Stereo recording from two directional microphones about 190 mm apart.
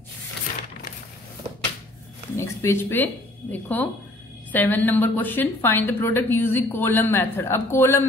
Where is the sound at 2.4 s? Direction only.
10° left (ahead or behind).